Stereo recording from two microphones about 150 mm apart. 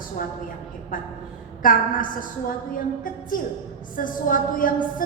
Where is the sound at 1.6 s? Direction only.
65° left (ahead or behind).